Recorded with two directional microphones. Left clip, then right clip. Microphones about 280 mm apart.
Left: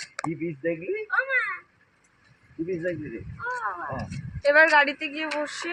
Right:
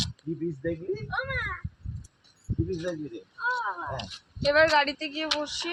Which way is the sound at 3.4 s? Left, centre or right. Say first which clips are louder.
Right 1 dB; right.